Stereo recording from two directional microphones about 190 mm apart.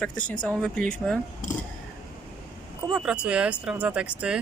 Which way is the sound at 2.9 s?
5° right (ahead or behind).